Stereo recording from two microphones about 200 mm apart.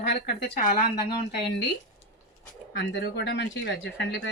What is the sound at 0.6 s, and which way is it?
Speech, 45° left (ahead or behind).